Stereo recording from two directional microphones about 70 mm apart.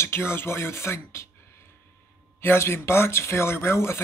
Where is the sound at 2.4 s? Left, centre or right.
Left.